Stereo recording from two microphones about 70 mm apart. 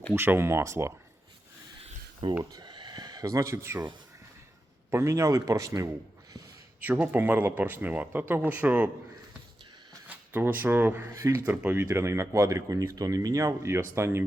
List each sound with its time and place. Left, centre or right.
0.2 s speech: right
2.4 s speech: right
4.9 s speech: right
6.8 s speech: right
10.1 s speech: right
11.1 s speech: right
11.4 s speech: right
11.8 s speech: right